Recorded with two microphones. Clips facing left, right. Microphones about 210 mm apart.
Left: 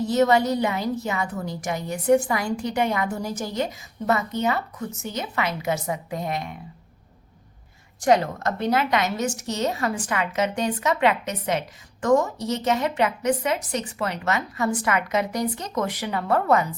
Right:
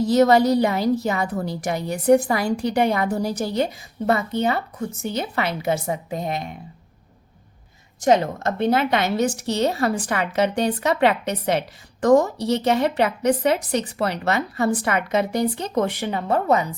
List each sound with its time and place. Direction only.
0.0 s a woman's voice: 40° right (ahead or behind)
8.0 s a woman's voice: 25° right (ahead or behind)